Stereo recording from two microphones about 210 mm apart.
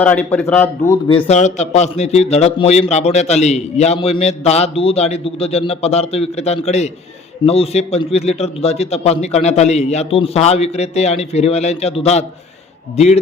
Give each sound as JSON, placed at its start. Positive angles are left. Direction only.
{"t": 0.0, "sound": "speech", "side_deg": 5}
{"t": 1.3, "sound": "a man's voice", "side_deg": 35}